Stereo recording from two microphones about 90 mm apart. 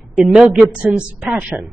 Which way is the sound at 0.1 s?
5° right (ahead or behind).